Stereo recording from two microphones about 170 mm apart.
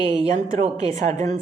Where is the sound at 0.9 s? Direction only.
45° right (ahead or behind).